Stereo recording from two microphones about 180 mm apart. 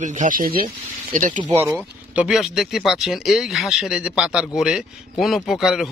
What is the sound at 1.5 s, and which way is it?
Speech, 15° right (ahead or behind).